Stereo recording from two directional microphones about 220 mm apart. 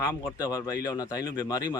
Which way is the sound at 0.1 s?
20° left (ahead or behind).